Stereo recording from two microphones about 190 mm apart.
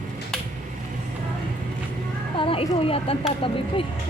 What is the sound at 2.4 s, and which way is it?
Speech, 30° left (ahead or behind).